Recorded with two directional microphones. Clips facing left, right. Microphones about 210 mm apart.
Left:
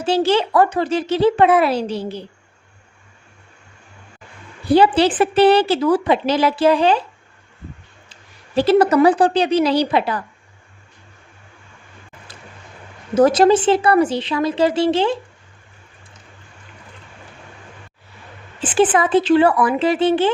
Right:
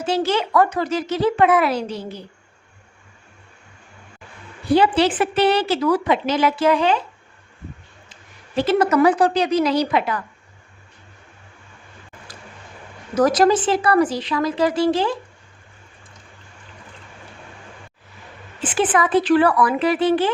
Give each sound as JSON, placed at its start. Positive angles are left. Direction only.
{"t": 0.0, "sound": "a woman's voice", "side_deg": 30}
{"t": 4.7, "sound": "a woman's voice", "side_deg": 35}
{"t": 8.1, "sound": "a woman's voice", "side_deg": 35}
{"t": 13.1, "sound": "speech", "side_deg": 25}
{"t": 18.6, "sound": "speech", "side_deg": 30}